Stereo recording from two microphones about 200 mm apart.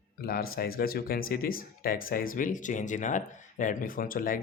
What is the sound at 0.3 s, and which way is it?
Speech, 50° left (ahead or behind).